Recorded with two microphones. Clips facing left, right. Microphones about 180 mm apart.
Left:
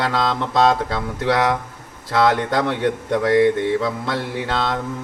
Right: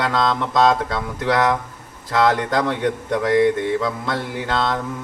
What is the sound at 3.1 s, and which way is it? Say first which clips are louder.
A man's voice: left 1 dB; 25° left (ahead or behind).